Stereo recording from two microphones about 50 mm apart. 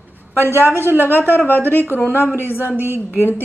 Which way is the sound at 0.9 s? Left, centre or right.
Left.